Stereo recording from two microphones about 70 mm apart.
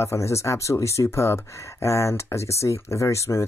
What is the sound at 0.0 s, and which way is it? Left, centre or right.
Speech, left.